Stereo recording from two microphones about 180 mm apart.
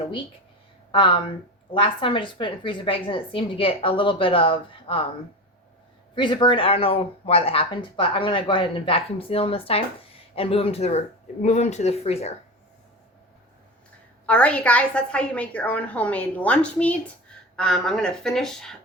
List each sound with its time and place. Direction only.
0.9 s a woman's voice: 30° left (ahead or behind)
6.1 s speech: 25° left (ahead or behind)
14.3 s a woman's voice: 5° left (ahead or behind)